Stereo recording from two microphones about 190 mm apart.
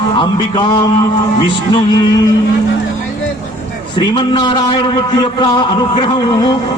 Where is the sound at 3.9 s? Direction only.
25° left (ahead or behind).